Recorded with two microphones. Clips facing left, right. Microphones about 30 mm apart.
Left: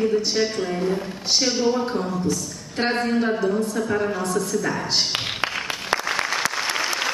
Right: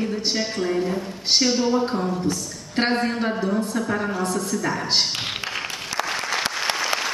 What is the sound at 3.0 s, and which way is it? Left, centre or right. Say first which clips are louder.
Speech: left 3 dB; centre.